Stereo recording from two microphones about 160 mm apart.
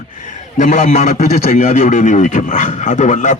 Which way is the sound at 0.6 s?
45° left (ahead or behind).